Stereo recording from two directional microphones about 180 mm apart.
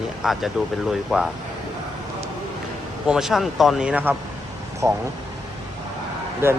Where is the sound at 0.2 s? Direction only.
Centre (ahead or behind).